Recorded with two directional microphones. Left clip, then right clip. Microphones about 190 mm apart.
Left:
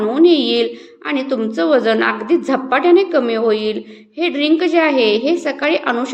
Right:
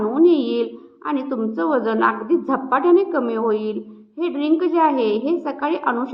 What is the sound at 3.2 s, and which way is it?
A woman's voice, 20° left (ahead or behind).